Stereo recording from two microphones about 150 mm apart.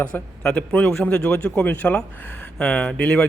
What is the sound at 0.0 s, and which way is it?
A man's voice, 10° left (ahead or behind).